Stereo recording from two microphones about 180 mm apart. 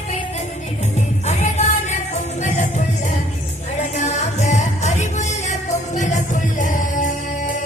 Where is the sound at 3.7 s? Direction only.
40° left (ahead or behind).